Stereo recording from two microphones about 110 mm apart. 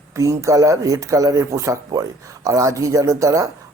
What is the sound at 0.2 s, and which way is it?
Speech, 30° right (ahead or behind).